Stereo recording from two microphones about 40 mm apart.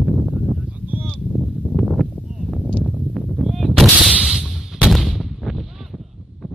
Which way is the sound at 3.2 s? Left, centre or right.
Centre.